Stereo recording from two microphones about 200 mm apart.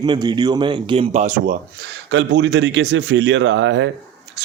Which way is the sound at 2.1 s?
65° right (ahead or behind).